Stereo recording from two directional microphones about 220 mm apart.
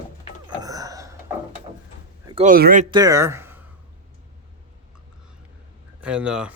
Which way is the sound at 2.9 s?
15° right (ahead or behind).